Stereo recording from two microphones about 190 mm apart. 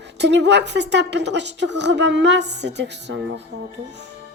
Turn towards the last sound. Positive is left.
turn(degrees=-65)  # may be behind; listen again after turning